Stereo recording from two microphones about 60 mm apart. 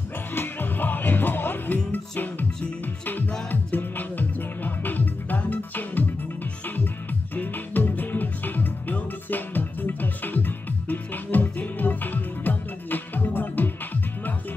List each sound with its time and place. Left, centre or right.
0.3 s music: left